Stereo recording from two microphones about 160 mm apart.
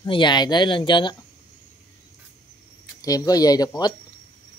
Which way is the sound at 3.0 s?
20° left (ahead or behind).